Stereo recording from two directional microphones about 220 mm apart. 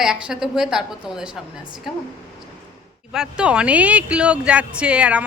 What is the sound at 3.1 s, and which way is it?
Speech, 5° right (ahead or behind).